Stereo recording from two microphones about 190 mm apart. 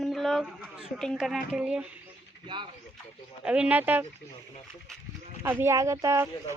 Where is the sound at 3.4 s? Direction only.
5° right (ahead or behind).